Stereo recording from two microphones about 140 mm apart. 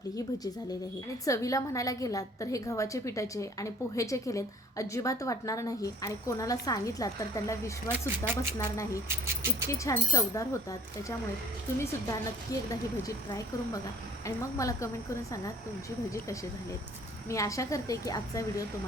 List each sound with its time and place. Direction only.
0.2 s a woman's voice: 25° left (ahead or behind)
7.9 s speech: 15° right (ahead or behind)
8.4 s a woman's voice: 25° left (ahead or behind)
9.0 s speech: 15° right (ahead or behind)
9.6 s a woman's voice: 20° left (ahead or behind)
11.8 s a woman's voice: 20° left (ahead or behind)
14.3 s a woman's voice: 25° left (ahead or behind)
17.2 s a woman's voice: 20° left (ahead or behind)